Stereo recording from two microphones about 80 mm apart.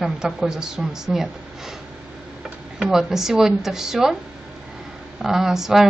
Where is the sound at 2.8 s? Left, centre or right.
Centre.